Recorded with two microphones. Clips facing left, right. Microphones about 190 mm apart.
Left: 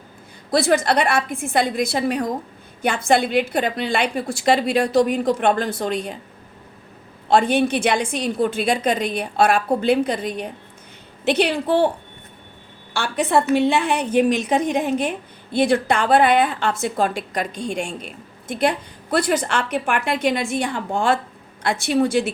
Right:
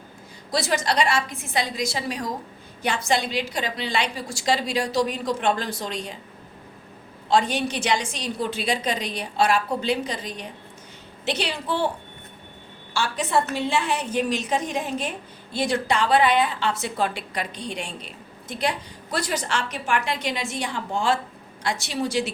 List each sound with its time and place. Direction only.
0.5 s a woman's voice: 55° left (ahead or behind)
7.3 s a woman's voice: 55° left (ahead or behind)
12.9 s a woman's voice: 60° left (ahead or behind)